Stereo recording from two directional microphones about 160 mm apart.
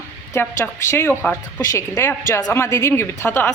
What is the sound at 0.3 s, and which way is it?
A woman's voice, 15° left (ahead or behind).